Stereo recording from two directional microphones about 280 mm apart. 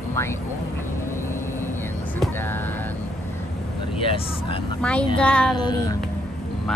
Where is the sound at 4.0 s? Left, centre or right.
Centre.